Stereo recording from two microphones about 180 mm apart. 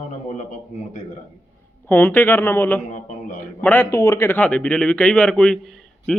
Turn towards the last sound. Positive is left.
turn(degrees=5)  # may be behind; listen again after turning